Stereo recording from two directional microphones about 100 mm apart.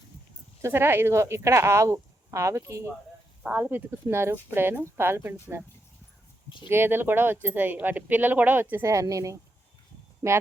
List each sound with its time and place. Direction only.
0.6 s speech: 25° right (ahead or behind)
3.4 s speech: 20° right (ahead or behind)
6.7 s speech: 25° right (ahead or behind)
8.7 s a woman's voice: 30° right (ahead or behind)